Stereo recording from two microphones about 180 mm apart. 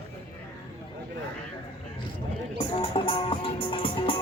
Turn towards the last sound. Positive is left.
turn(degrees=25)  # may be behind; listen again after turning